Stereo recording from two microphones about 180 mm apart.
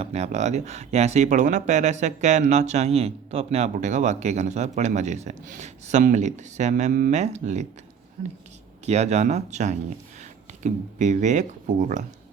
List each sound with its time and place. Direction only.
0.0 s speech: 35° right (ahead or behind)
8.9 s speech: 35° right (ahead or behind)